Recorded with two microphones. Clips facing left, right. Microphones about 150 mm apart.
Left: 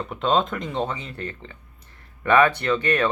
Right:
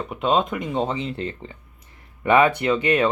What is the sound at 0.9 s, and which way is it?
Speech, 25° right (ahead or behind).